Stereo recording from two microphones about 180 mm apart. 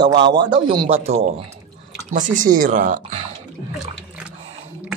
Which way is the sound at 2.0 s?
45° right (ahead or behind).